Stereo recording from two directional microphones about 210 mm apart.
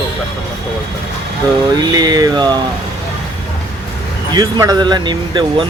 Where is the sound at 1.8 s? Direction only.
20° right (ahead or behind).